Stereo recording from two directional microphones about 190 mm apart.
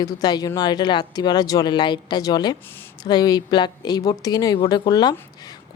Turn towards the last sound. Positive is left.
turn(degrees=20)  # may be behind; listen again after turning